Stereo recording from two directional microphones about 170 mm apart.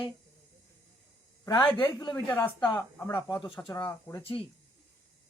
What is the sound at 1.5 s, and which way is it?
Speech, 30° left (ahead or behind).